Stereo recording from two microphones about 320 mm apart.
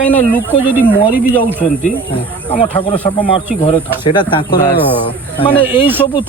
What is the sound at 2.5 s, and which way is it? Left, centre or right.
Speech, centre.